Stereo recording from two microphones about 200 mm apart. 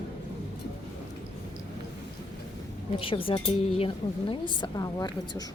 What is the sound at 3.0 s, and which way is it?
A woman's voice, 25° left (ahead or behind).